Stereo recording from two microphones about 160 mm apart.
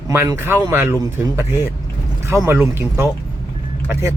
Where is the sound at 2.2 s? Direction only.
15° right (ahead or behind).